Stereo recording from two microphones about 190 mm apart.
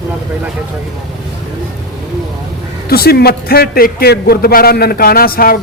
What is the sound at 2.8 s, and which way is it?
A man's voice, 55° left (ahead or behind).